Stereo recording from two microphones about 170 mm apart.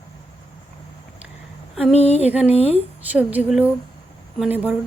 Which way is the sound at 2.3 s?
10° right (ahead or behind).